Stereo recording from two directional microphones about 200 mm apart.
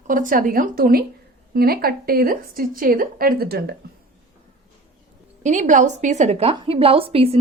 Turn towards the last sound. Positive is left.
turn(degrees=-30)  # may be behind; listen again after turning